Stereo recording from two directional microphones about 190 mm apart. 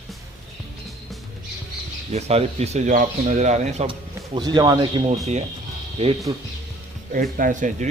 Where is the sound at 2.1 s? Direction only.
35° right (ahead or behind).